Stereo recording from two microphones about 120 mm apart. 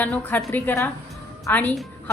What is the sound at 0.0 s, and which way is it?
A woman's voice, 15° left (ahead or behind).